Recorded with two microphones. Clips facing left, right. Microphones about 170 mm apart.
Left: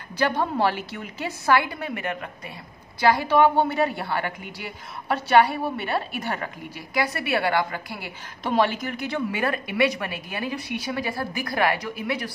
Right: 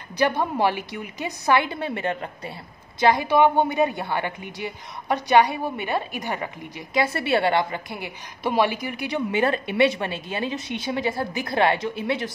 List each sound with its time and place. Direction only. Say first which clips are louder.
0.4 s a woman's voice: right 1 dB; 15° right (ahead or behind)
3.0 s a woman's voice: right 1 dB; 20° right (ahead or behind)